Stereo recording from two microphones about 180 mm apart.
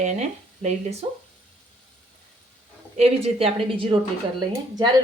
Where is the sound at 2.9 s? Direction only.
35° right (ahead or behind).